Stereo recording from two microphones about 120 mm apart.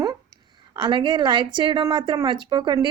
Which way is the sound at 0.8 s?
40° right (ahead or behind).